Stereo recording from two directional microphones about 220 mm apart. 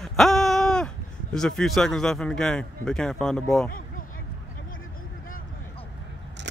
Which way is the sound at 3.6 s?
40° left (ahead or behind).